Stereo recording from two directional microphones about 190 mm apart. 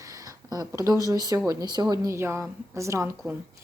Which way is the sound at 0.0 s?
15° right (ahead or behind).